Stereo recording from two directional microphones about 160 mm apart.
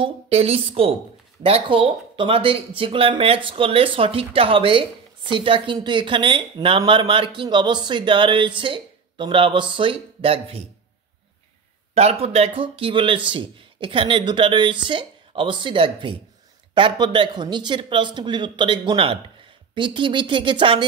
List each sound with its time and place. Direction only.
0.0 s speech: 40° right (ahead or behind)
11.9 s speech: 40° right (ahead or behind)